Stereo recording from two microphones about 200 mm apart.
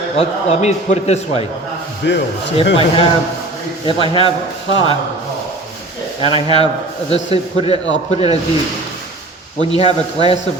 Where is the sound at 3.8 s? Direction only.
25° left (ahead or behind).